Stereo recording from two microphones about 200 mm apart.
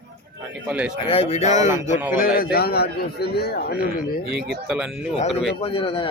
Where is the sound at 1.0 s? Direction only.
30° left (ahead or behind).